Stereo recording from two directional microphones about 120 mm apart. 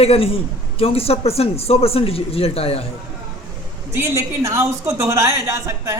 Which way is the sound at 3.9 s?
20° right (ahead or behind).